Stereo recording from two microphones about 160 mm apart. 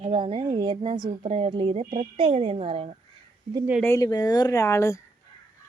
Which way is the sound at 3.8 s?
20° left (ahead or behind).